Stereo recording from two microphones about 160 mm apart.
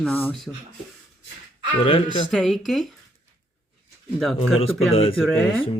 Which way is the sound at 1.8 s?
30° left (ahead or behind).